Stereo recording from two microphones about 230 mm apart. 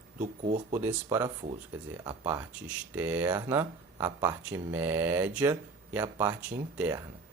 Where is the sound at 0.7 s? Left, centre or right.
Centre.